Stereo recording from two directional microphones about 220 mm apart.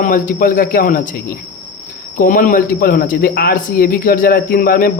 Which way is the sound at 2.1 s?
35° left (ahead or behind).